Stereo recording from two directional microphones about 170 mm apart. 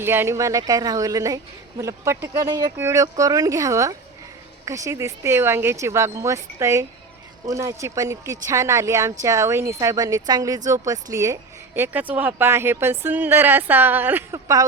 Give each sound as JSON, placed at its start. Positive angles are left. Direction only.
{"t": 0.0, "sound": "a woman's voice", "side_deg": -15}